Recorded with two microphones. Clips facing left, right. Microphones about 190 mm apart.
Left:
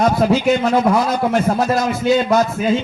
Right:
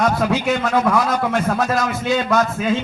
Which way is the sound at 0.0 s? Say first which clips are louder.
Left 4 dB; 30° left (ahead or behind).